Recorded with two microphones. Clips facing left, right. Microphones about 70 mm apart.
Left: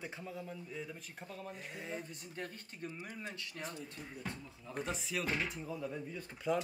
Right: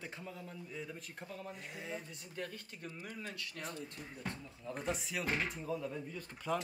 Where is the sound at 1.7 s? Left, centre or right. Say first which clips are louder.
Left 1 dB; left.